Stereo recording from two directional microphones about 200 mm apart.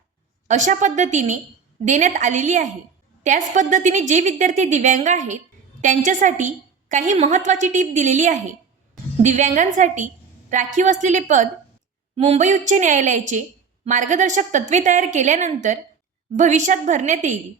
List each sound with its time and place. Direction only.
0.4 s a woman's voice: 35° right (ahead or behind)